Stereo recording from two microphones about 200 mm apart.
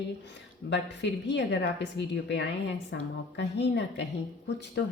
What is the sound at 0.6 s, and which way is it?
Speech, 60° left (ahead or behind).